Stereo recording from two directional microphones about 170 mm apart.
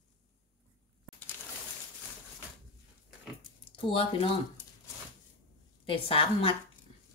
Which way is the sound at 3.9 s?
35° left (ahead or behind).